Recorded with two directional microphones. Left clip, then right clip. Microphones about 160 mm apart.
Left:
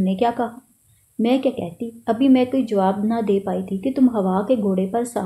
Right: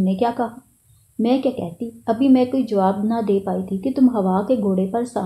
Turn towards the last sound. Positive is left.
turn(degrees=5)  # may be behind; listen again after turning